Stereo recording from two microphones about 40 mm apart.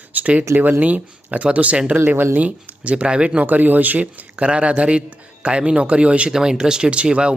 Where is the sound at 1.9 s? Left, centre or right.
Right.